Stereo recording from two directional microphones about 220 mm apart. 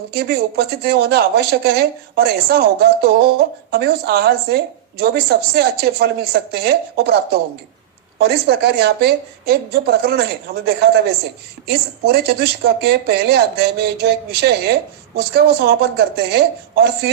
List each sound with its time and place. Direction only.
0.1 s speech: 45° right (ahead or behind)